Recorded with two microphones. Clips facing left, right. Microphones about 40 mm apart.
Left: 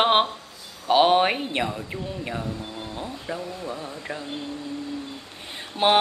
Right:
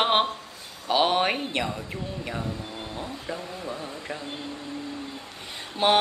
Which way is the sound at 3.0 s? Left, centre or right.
Centre.